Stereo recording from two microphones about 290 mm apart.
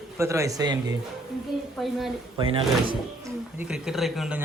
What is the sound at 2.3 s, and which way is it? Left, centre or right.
Speech, centre.